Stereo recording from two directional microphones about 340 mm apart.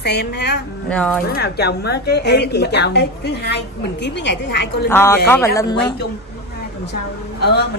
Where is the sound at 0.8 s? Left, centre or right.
Centre.